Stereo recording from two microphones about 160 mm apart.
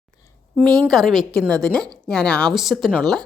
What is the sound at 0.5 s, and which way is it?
A woman's voice, 5° left (ahead or behind).